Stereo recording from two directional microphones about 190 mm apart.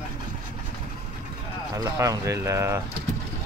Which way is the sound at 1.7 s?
20° right (ahead or behind).